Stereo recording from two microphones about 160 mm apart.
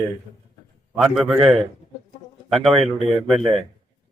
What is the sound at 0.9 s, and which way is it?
Speech, centre (ahead or behind).